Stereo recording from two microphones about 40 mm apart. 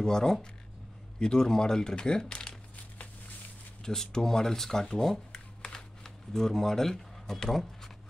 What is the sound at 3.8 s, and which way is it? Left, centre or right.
Speech, centre.